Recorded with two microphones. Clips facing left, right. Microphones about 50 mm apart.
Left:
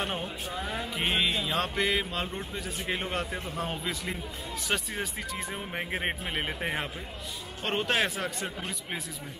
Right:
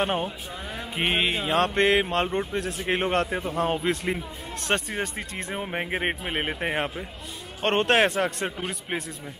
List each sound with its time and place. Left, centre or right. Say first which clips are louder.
0.0 s a man's voice: right 7 dB; right
0.9 s music: right 4 dB; right
3.3 s speech: right 7 dB; right
3.5 s a man's voice: right 10 dB; right
4.7 s speech: right 5 dB; right
7.6 s music: right 7 dB; right
8.5 s a man's voice: right 5 dB; right